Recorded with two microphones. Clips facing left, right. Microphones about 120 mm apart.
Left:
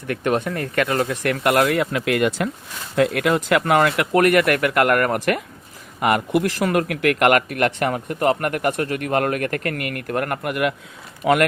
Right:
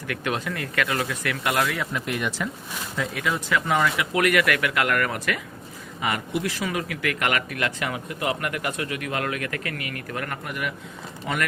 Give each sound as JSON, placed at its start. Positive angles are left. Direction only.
{"t": 0.4, "sound": "speech", "side_deg": 40}
{"t": 1.8, "sound": "speech", "side_deg": 90}
{"t": 2.9, "sound": "speech", "side_deg": 65}
{"t": 11.3, "sound": "speech", "side_deg": 90}